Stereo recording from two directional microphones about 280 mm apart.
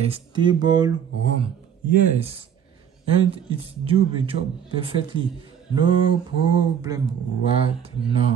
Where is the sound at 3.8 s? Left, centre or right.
Centre.